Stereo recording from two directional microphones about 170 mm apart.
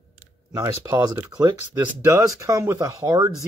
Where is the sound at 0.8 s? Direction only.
20° right (ahead or behind).